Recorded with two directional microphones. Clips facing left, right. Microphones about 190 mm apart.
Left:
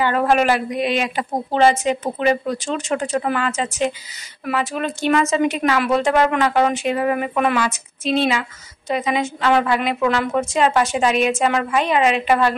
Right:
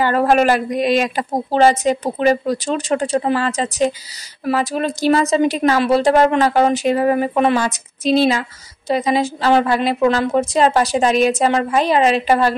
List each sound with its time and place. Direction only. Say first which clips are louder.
0.0 s a woman's voice: right 3 dB; 40° right (ahead or behind)